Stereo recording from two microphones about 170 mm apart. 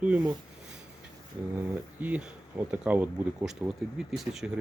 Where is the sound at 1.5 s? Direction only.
10° right (ahead or behind).